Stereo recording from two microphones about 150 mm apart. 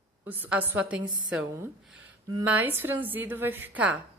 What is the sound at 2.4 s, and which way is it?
A woman's voice, 10° right (ahead or behind).